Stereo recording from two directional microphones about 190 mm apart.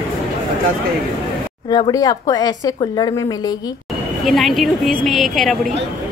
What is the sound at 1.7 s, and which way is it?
Speech, 20° left (ahead or behind).